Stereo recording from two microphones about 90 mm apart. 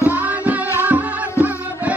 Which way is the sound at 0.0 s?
20° right (ahead or behind).